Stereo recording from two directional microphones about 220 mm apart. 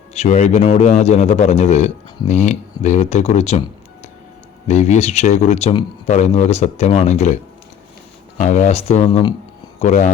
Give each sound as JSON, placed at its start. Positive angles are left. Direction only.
{"t": 0.1, "sound": "a man's voice", "side_deg": 30}
{"t": 4.7, "sound": "speech", "side_deg": 30}
{"t": 8.4, "sound": "speech", "side_deg": 35}